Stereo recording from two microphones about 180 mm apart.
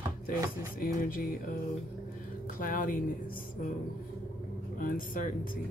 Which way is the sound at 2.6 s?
50° left (ahead or behind).